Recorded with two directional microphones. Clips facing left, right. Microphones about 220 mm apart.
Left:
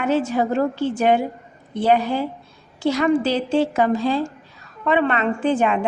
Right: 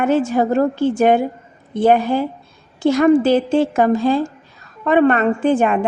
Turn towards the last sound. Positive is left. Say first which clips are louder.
# right 4 dB
turn(degrees=-50)  # may be behind; listen again after turning